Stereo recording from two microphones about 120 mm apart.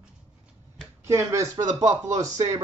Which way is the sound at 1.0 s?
25° right (ahead or behind).